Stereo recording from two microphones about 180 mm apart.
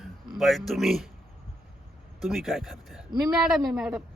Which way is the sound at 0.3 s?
Centre (ahead or behind).